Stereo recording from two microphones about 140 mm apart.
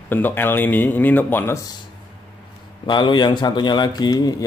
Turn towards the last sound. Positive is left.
turn(degrees=30)  # may be behind; listen again after turning